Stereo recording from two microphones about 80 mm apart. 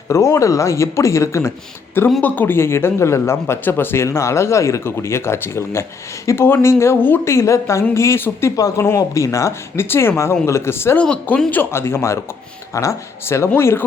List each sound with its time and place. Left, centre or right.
0.1 s speech: left
2.2 s speech: left
10.9 s speech: centre
11.5 s speech: left